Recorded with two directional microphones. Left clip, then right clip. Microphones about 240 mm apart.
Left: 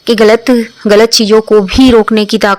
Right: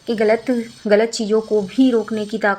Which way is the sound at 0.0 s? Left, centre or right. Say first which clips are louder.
Left 11 dB; left.